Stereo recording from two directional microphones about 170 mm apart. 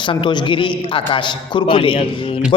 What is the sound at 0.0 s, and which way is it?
A man's voice, 30° left (ahead or behind).